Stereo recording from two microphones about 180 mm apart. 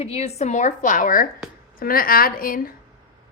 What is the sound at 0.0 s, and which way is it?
A woman's voice, 35° left (ahead or behind).